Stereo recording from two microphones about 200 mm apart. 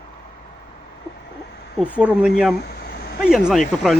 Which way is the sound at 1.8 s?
5° right (ahead or behind).